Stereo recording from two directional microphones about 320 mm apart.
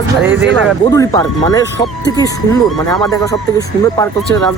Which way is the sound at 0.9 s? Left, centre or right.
Centre.